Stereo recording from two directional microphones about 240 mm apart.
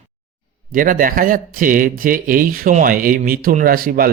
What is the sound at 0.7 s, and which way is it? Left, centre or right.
Speech, right.